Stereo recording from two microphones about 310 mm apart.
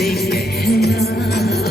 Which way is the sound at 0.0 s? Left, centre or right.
Left.